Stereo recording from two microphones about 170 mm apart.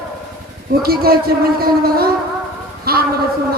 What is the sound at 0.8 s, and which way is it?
A man's voice, 65° right (ahead or behind).